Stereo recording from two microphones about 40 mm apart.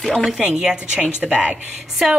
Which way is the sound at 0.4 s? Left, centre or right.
Centre.